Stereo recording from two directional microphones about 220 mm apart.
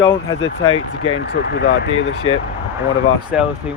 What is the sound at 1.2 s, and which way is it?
Speech, 50° left (ahead or behind).